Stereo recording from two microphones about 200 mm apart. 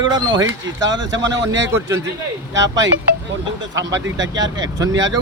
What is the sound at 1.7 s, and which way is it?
Speech, 15° right (ahead or behind).